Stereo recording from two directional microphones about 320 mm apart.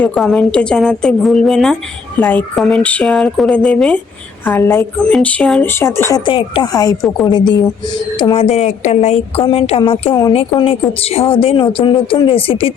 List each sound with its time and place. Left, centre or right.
0.0 s a woman's voice: centre